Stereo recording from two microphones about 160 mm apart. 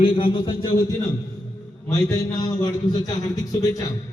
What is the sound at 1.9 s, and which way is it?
A man's voice, 25° left (ahead or behind).